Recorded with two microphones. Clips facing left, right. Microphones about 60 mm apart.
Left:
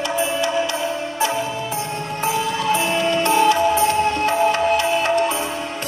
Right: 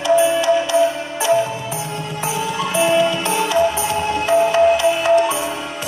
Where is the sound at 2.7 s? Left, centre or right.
Left.